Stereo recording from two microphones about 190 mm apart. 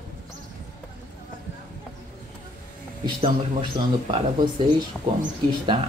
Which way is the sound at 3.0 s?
25° right (ahead or behind).